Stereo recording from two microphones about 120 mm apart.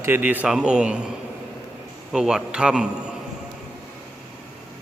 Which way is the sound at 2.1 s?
5° right (ahead or behind).